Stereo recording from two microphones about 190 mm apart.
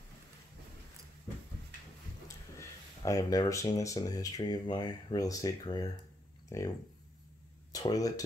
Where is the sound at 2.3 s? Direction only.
15° left (ahead or behind).